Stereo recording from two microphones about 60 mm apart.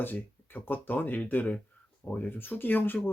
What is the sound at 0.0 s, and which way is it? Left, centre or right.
Speech, left.